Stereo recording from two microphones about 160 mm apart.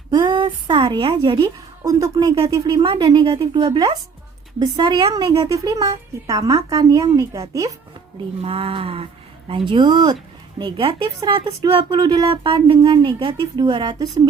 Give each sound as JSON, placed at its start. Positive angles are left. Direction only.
{"t": 0.1, "sound": "a sound", "side_deg": -30}
{"t": 1.8, "sound": "speech", "side_deg": -20}
{"t": 8.4, "sound": "speech", "side_deg": -35}